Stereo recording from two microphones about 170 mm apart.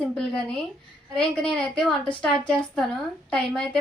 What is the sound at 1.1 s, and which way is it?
Speech, 5° left (ahead or behind).